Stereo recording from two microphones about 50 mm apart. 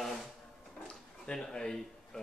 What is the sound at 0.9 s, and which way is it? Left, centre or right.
Speech, centre.